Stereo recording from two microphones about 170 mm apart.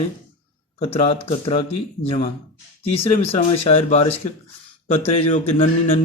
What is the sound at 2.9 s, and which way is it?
Speech, 35° left (ahead or behind).